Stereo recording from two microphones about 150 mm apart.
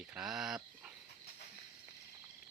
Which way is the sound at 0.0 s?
5° right (ahead or behind).